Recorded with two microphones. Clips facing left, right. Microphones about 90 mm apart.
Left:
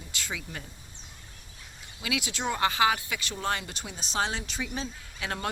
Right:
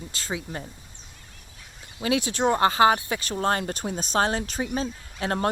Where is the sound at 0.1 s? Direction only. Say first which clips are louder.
Right 4 dB; 35° right (ahead or behind).